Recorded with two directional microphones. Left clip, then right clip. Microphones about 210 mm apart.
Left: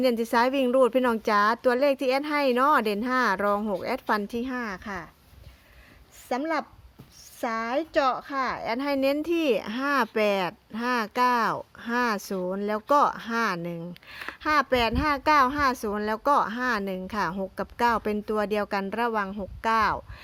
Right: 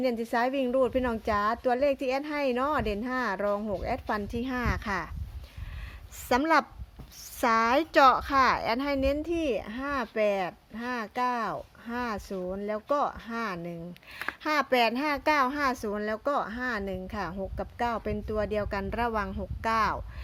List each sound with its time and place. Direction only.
0.0 s a child's voice: 30° left (ahead or behind); by 5.1 s centre (ahead or behind)
6.2 s speech: 10° right (ahead or behind); by 9.0 s 10° left (ahead or behind)
9.0 s a child's voice: 25° left (ahead or behind)